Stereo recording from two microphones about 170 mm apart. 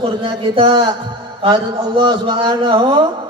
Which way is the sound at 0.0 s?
30° right (ahead or behind).